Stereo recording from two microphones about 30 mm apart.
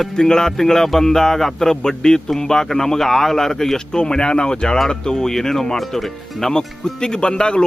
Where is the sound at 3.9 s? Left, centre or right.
Left; by 6.5 s centre.